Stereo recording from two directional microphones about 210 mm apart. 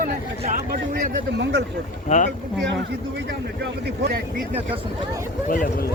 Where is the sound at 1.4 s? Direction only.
55° right (ahead or behind).